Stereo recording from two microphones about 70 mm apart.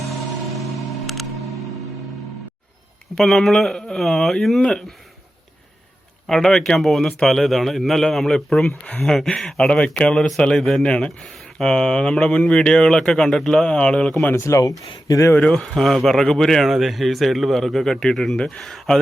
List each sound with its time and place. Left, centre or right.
0.6 s music: centre
3.2 s speech: centre
6.2 s speech: centre
14.3 s speech: left
15.4 s speech: centre